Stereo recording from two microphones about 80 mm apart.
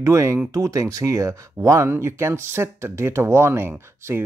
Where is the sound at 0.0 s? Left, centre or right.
Right.